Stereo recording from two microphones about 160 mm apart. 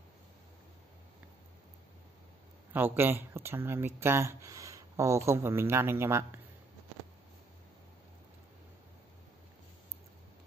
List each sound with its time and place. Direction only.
2.7 s speech: 15° right (ahead or behind)